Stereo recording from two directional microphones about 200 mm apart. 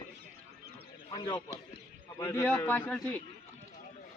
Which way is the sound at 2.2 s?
10° left (ahead or behind).